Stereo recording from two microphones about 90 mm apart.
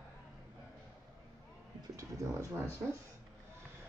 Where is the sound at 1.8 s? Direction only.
35° right (ahead or behind).